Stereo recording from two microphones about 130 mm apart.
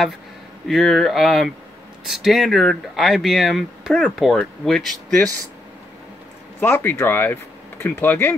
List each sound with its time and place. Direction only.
0.7 s speech: centre (ahead or behind)
6.6 s speech: 15° left (ahead or behind)